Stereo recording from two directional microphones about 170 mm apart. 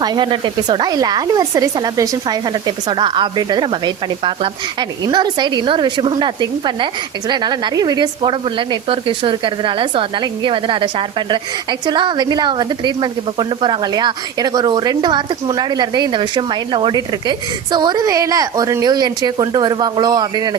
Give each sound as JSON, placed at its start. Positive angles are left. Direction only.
{"t": 0.0, "sound": "speech", "side_deg": -25}